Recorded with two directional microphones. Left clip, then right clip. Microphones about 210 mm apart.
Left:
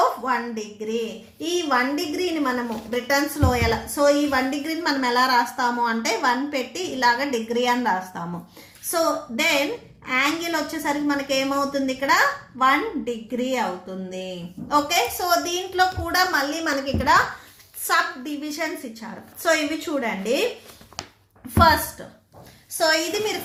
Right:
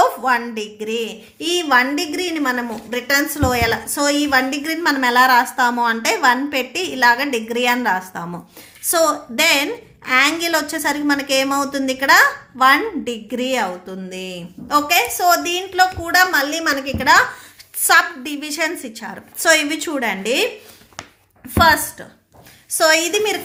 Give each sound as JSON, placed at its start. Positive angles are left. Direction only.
{"t": 0.3, "sound": "a woman's voice", "side_deg": -35}
{"t": 10.1, "sound": "a woman's voice", "side_deg": -40}
{"t": 21.5, "sound": "a woman's voice", "side_deg": -30}
{"t": 22.8, "sound": "a woman's voice", "side_deg": -40}